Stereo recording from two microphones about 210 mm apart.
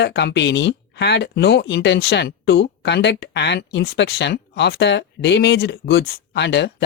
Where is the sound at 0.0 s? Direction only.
55° left (ahead or behind).